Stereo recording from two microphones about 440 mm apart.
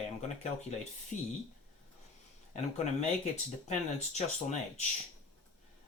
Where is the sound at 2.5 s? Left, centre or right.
Centre.